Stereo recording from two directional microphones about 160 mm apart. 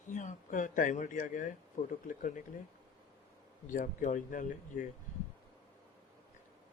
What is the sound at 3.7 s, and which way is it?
Speech, 55° left (ahead or behind).